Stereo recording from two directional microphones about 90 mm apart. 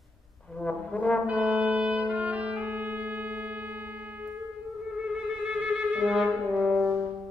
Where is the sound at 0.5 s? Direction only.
10° left (ahead or behind).